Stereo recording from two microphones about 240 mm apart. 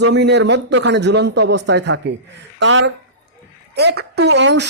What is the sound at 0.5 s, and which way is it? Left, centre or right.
Speech, right.